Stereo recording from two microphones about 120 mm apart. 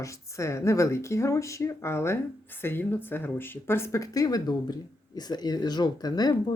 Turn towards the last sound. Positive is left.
turn(degrees=35)  # may be behind; listen again after turning